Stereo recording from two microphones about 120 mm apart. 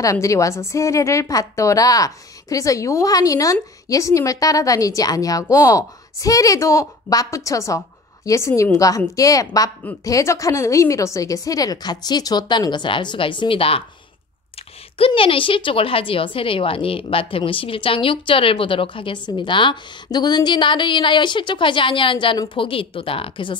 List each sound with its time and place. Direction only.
0.0 s a woman's voice: 25° left (ahead or behind); by 13.8 s 50° left (ahead or behind)
15.0 s a woman's voice: 50° left (ahead or behind)